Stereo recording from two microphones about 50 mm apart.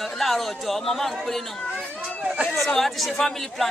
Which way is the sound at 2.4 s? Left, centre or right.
Centre.